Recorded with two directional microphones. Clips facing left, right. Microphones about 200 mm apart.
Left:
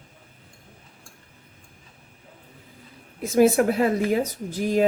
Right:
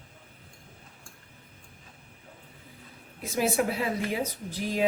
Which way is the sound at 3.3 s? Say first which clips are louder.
Left 9 dB; 50° left (ahead or behind).